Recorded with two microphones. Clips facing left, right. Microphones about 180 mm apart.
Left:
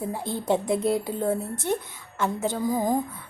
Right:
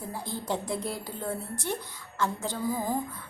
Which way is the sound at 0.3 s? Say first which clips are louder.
Left 8 dB; 20° left (ahead or behind).